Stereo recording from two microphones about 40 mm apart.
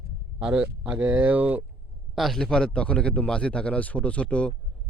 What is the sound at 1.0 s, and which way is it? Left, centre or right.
Speech, right.